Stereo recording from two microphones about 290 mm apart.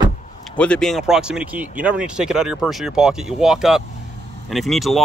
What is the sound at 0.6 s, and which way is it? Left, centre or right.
Speech, centre.